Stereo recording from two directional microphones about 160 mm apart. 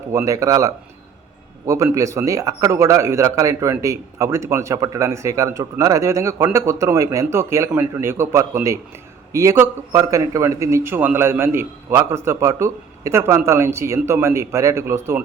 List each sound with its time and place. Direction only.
0.1 s a man's voice: 20° right (ahead or behind)